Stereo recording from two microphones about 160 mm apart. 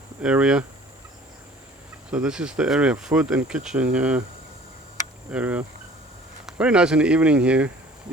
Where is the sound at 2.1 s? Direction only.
5° right (ahead or behind).